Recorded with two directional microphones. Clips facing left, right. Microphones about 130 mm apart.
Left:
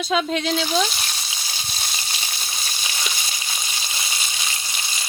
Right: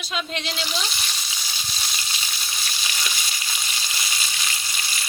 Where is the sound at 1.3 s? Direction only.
30° left (ahead or behind).